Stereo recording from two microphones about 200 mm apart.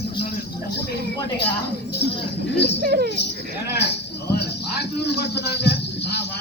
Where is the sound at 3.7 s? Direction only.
55° left (ahead or behind).